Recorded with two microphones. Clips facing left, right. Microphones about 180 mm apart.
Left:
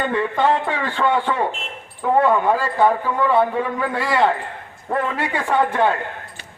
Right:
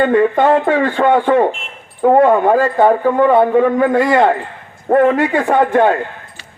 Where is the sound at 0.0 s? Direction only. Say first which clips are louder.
Right 8 dB; 45° right (ahead or behind).